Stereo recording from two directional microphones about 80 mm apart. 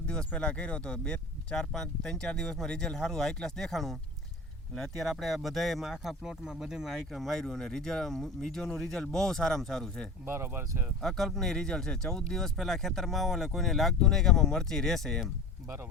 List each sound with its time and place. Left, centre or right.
0.1 s speech: centre
10.2 s speech: right
11.0 s speech: centre